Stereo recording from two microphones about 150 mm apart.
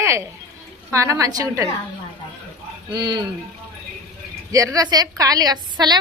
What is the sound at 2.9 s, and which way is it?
Speech, 30° right (ahead or behind).